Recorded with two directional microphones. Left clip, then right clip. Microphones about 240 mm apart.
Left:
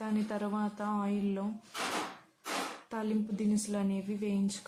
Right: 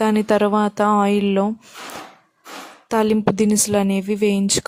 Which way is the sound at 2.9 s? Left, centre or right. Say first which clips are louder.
Right 19 dB; right.